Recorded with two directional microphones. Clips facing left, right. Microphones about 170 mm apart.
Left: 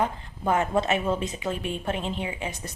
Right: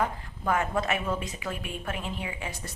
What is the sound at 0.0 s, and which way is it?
A woman's voice, 25° left (ahead or behind).